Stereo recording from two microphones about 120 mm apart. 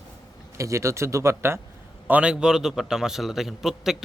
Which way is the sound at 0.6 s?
25° right (ahead or behind).